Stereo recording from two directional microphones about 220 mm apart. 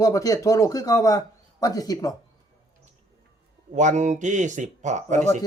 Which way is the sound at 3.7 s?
35° right (ahead or behind).